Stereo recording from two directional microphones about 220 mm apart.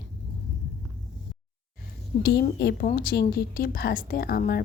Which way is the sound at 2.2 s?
50° left (ahead or behind).